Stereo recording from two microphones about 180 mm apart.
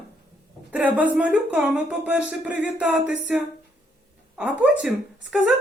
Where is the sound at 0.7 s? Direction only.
10° right (ahead or behind).